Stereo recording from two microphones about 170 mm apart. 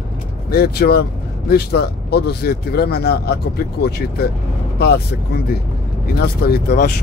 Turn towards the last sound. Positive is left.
turn(degrees=65)  # may be behind; listen again after turning